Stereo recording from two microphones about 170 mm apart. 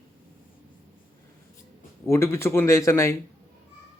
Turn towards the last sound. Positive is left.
turn(degrees=15)  # may be behind; listen again after turning